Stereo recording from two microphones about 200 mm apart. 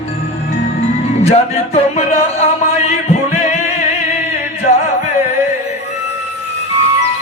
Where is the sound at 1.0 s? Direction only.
30° left (ahead or behind).